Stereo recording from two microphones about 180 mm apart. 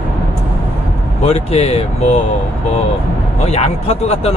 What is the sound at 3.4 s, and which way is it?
Speech, 35° left (ahead or behind).